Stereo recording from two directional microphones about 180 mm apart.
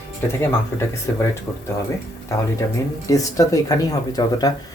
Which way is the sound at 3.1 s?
20° left (ahead or behind).